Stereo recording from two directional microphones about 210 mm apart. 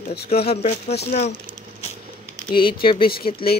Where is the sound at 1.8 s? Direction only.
30° left (ahead or behind).